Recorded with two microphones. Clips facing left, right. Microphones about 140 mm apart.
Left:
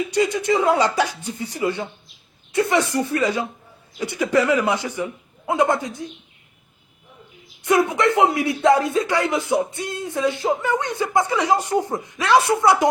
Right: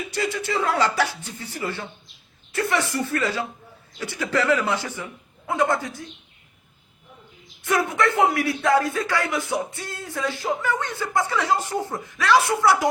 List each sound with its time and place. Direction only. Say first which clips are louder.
0.1 s speech: left 5 dB; 15° left (ahead or behind)
7.6 s speech: left 4 dB; 20° left (ahead or behind)